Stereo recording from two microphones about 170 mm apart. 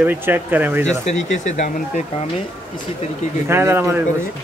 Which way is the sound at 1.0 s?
45° left (ahead or behind).